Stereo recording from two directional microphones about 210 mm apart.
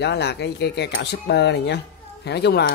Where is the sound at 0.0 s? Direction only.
55° left (ahead or behind).